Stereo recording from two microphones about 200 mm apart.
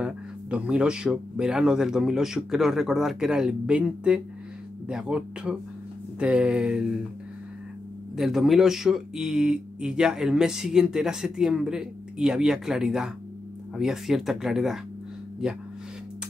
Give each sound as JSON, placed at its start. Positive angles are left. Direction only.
{"t": 0.0, "sound": "speech", "side_deg": -5}
{"t": 8.2, "sound": "speech", "side_deg": 0}